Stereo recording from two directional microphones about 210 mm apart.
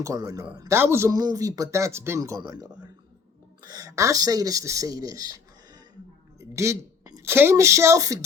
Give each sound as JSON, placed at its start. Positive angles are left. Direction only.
{"t": 0.0, "sound": "a man's voice", "side_deg": -15}
{"t": 6.4, "sound": "speech", "side_deg": -15}